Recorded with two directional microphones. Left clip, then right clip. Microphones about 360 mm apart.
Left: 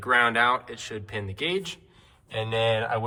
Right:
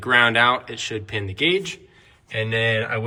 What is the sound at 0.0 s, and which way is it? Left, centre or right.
Speech, centre.